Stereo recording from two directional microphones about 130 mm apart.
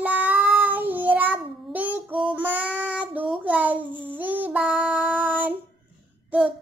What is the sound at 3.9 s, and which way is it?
Babbling, 40° right (ahead or behind).